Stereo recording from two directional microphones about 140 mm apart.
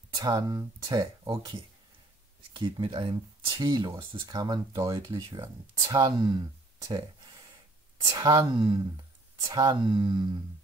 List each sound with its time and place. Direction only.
0.1 s speech: 25° right (ahead or behind)
8.1 s speech: 25° right (ahead or behind)